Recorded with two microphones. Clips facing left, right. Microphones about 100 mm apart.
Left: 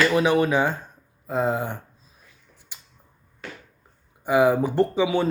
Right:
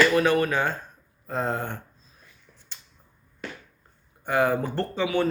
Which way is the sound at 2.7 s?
10° left (ahead or behind).